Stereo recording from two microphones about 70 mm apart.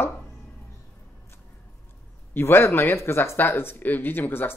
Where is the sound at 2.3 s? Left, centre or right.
Left.